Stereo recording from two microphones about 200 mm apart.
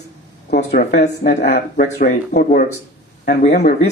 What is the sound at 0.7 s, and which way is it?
Speech, 50° left (ahead or behind).